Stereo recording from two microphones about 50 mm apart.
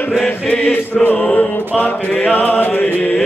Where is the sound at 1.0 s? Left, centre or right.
Left.